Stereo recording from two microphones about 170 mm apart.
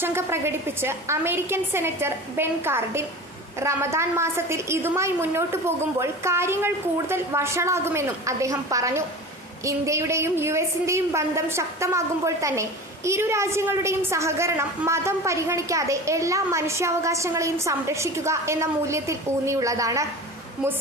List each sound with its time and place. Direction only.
0.0 s a woman's voice: 15° right (ahead or behind)